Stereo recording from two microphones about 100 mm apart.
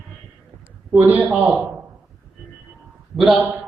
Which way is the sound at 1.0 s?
15° right (ahead or behind).